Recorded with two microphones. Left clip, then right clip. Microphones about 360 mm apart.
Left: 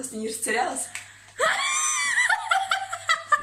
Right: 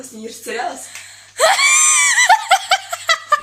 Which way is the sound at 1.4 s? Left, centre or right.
Centre.